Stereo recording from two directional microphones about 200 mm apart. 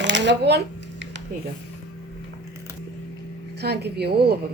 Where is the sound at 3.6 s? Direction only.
55° right (ahead or behind).